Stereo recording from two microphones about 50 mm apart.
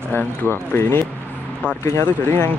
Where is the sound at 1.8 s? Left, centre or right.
Left.